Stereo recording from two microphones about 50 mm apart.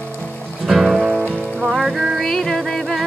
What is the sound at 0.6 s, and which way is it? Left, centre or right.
Music, centre.